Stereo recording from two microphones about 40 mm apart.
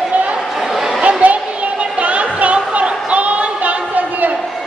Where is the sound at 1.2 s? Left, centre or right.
Right.